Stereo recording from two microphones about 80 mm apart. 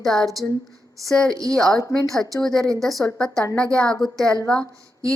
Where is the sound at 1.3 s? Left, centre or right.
Right.